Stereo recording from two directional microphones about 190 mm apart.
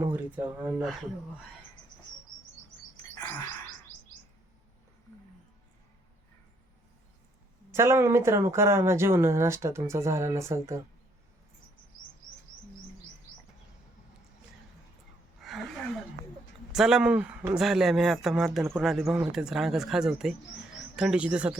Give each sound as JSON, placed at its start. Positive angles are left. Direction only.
{"t": 0.0, "sound": "speech", "side_deg": -10}
{"t": 7.7, "sound": "speech", "side_deg": -15}
{"t": 15.4, "sound": "gasp", "side_deg": 0}
{"t": 16.7, "sound": "a man's voice", "side_deg": -5}